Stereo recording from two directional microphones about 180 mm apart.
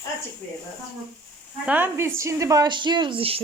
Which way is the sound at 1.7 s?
10° right (ahead or behind).